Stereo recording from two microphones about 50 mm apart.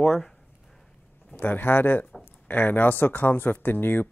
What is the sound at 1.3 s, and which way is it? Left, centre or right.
Speech, left.